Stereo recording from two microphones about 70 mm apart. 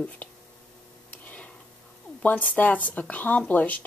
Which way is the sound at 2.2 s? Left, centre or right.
Left.